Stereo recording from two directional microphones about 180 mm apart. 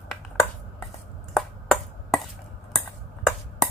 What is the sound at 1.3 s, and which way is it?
Finger snapping, 5° left (ahead or behind).